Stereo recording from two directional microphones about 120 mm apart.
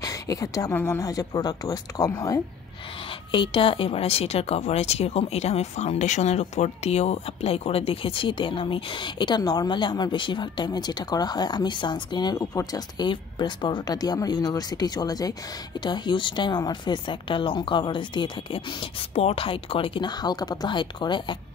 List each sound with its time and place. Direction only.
0.0 s a woman's voice: 30° left (ahead or behind)
3.3 s a woman's voice: 45° left (ahead or behind)